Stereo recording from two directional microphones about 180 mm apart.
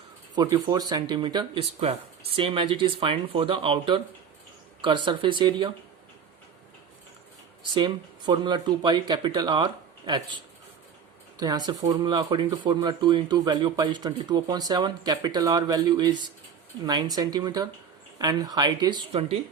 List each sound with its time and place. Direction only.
0.5 s speech: 25° right (ahead or behind)
7.7 s speech: 25° right (ahead or behind)